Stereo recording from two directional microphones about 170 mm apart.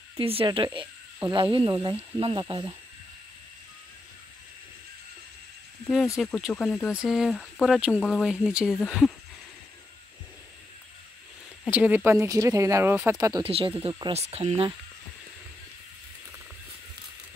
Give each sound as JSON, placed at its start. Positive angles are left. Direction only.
{"t": 0.2, "sound": "speech", "side_deg": -35}
{"t": 6.2, "sound": "speech", "side_deg": 0}
{"t": 6.5, "sound": "speech", "side_deg": 10}
{"t": 6.9, "sound": "speech", "side_deg": -5}
{"t": 11.6, "sound": "speech", "side_deg": -10}
{"t": 13.4, "sound": "speech", "side_deg": -35}